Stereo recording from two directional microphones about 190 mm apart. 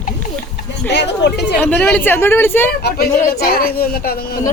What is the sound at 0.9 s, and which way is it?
Speech, 65° left (ahead or behind).